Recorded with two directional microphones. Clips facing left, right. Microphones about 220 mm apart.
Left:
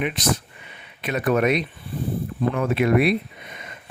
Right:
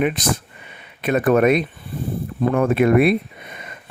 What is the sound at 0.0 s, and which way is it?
Speech, 50° right (ahead or behind).